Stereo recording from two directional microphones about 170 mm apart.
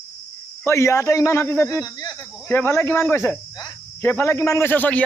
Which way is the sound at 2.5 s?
10° left (ahead or behind).